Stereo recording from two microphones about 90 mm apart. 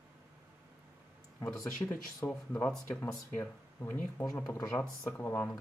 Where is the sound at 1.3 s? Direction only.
35° left (ahead or behind).